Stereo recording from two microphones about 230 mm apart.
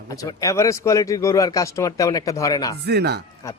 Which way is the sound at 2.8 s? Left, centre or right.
Right.